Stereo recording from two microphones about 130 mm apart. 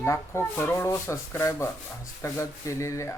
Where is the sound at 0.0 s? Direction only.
20° left (ahead or behind).